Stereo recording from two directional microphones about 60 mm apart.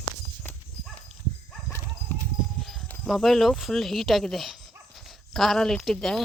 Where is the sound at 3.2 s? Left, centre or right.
Centre.